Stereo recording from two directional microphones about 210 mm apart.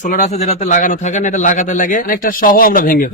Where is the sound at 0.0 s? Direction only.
35° left (ahead or behind).